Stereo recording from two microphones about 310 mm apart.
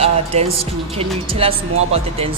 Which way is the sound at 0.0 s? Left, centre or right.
Centre.